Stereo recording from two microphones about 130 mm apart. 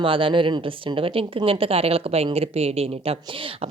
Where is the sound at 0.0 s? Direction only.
40° right (ahead or behind).